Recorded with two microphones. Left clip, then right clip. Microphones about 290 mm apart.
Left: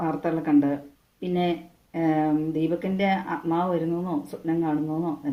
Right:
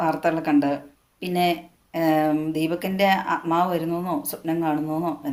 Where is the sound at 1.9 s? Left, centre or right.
Right.